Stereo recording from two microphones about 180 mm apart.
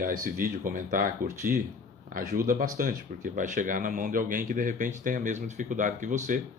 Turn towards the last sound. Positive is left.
turn(degrees=-45)  # may be behind; listen again after turning